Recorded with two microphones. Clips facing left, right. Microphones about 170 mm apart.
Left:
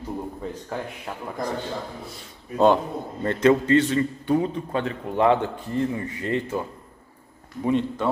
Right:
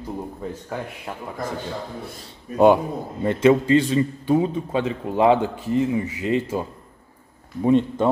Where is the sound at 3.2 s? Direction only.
10° right (ahead or behind).